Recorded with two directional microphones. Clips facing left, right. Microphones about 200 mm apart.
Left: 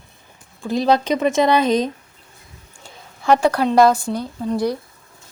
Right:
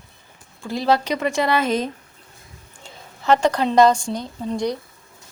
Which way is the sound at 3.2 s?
10° left (ahead or behind).